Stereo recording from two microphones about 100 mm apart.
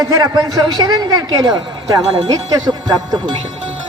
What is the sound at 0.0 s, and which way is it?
A man's voice, 40° right (ahead or behind).